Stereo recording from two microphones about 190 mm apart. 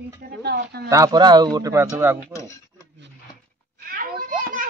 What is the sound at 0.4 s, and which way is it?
Speech, 60° right (ahead or behind).